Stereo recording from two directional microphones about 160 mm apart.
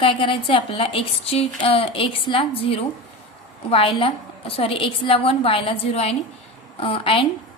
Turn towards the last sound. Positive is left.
turn(degrees=35)  # may be behind; listen again after turning